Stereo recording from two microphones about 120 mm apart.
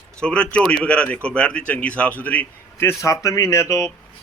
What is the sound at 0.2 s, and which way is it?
Speech, 10° left (ahead or behind).